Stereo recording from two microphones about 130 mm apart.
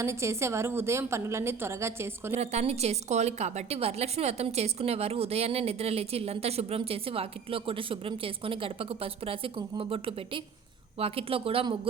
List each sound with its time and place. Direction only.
0.0 s a woman's voice: 20° right (ahead or behind)
2.4 s a woman's voice: 55° right (ahead or behind)